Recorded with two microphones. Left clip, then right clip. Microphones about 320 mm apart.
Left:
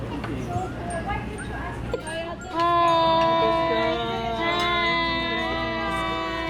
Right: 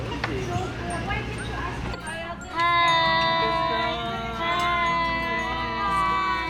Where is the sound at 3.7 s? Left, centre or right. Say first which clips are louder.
Left 2 dB; centre.